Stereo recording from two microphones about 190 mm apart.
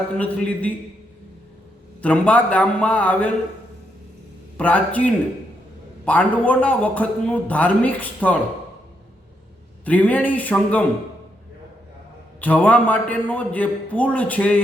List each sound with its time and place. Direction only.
0.2 s a man's voice: 5° left (ahead or behind)
2.0 s a man's voice: 10° left (ahead or behind)
4.5 s a man's voice: 10° left (ahead or behind)
9.8 s a man's voice: 10° left (ahead or behind)
12.4 s a man's voice: 10° left (ahead or behind)